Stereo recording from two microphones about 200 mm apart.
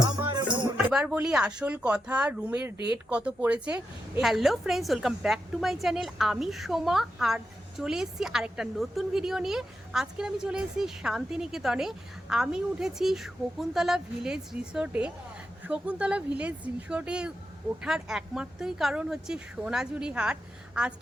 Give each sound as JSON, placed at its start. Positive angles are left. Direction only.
{"t": 0.0, "sound": "music", "side_deg": -20}
{"t": 0.9, "sound": "a woman's voice", "side_deg": -5}